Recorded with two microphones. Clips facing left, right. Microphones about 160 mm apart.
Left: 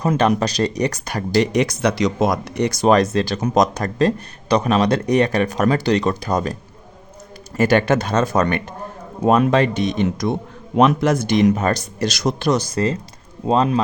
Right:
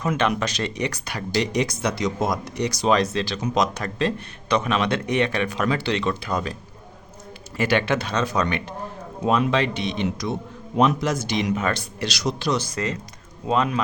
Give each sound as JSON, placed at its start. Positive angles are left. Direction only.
{"t": 0.0, "sound": "speech", "side_deg": 35}
{"t": 1.5, "sound": "speech", "side_deg": 70}
{"t": 10.8, "sound": "speech", "side_deg": 60}